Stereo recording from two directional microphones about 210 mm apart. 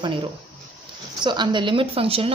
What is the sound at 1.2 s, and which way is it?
Speech, 20° right (ahead or behind).